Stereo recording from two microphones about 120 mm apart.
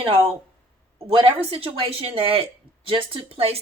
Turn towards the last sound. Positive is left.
turn(degrees=-50)  # may be behind; listen again after turning